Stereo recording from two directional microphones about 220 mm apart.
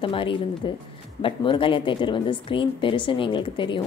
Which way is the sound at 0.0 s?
25° left (ahead or behind).